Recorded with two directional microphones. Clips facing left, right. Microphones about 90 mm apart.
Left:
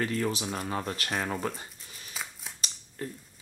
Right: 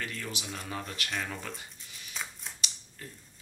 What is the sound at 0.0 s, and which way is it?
Speech, 40° left (ahead or behind).